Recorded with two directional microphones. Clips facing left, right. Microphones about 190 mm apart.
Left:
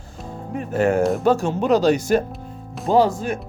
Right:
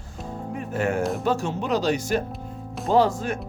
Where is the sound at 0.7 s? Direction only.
35° left (ahead or behind).